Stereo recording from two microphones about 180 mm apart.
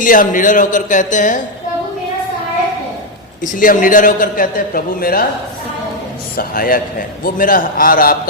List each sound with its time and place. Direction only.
0.0 s a man's voice: 50° left (ahead or behind)
3.4 s a man's voice: 50° left (ahead or behind)
6.3 s a man's voice: 55° left (ahead or behind)